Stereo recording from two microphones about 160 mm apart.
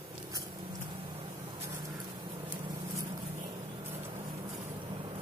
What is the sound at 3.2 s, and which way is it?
Vehicle, 35° right (ahead or behind).